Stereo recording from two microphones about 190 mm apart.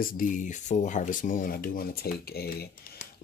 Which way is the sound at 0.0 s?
45° left (ahead or behind).